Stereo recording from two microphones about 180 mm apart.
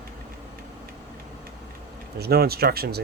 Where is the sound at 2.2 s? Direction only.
60° right (ahead or behind).